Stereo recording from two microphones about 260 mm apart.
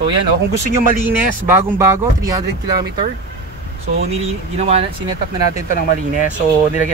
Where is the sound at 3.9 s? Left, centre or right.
Right.